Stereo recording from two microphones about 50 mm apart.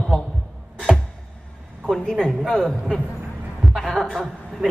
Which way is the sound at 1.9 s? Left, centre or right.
Centre.